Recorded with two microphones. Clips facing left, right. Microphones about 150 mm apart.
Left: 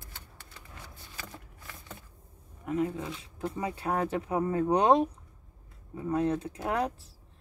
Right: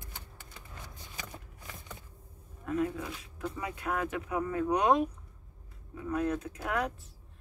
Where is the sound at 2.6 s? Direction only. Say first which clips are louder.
Left 1 dB; 20° left (ahead or behind).